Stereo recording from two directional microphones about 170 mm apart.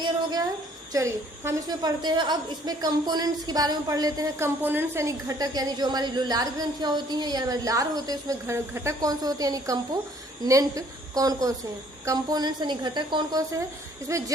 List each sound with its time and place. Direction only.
0.9 s a woman's voice: 20° right (ahead or behind)